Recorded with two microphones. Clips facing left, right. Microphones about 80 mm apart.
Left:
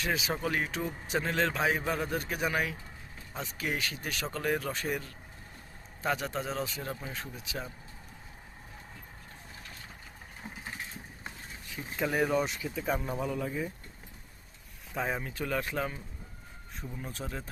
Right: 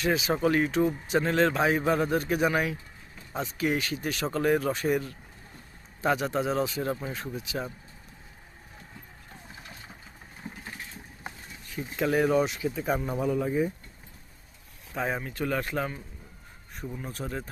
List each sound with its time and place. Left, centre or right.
0.0 s a man's voice: centre
10.5 s vehicle: centre
11.7 s a man's voice: centre
14.9 s speech: centre
16.8 s a man's voice: centre
17.1 s speech: centre